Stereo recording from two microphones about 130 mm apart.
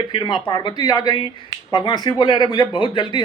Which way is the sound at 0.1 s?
40° left (ahead or behind).